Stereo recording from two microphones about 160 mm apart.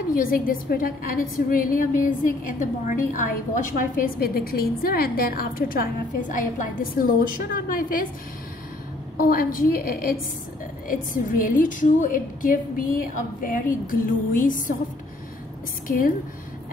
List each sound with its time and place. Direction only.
0.1 s a woman's voice: 60° left (ahead or behind)
9.2 s a woman's voice: 65° left (ahead or behind)